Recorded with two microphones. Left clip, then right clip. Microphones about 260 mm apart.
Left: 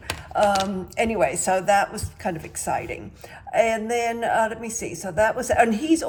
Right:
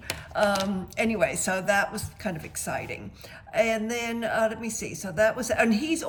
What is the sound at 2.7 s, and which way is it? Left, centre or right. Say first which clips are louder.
Speech: left 6 dB; centre.